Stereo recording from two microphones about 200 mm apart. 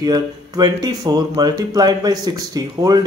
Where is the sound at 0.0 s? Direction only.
20° right (ahead or behind).